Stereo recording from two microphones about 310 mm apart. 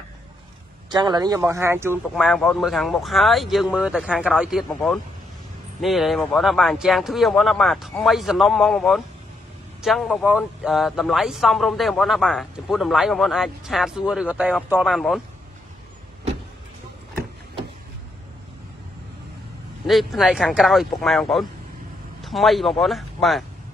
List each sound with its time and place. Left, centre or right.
0.8 s speech: centre
19.9 s speech: centre